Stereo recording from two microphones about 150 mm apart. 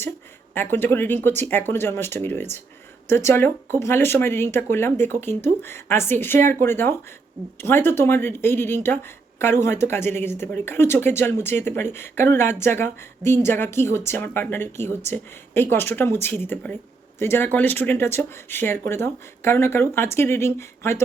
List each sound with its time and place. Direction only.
0.5 s speech: 15° left (ahead or behind)